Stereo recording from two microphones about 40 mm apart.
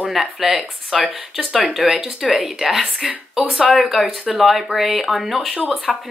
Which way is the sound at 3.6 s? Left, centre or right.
Right.